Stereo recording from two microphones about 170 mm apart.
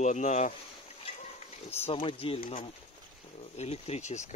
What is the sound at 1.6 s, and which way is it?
Speech, 35° left (ahead or behind).